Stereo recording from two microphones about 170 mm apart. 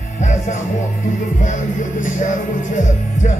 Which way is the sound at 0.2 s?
45° left (ahead or behind).